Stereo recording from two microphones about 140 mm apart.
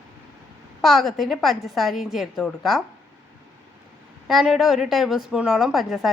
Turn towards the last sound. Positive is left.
turn(degrees=0)  # may be behind; listen again after turning